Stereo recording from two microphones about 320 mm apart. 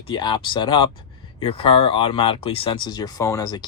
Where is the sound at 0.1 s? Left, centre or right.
Centre.